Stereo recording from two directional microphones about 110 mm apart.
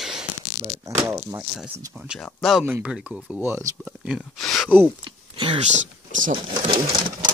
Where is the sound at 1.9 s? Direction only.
10° right (ahead or behind).